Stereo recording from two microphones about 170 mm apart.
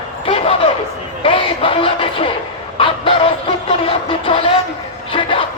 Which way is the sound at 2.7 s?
30° left (ahead or behind).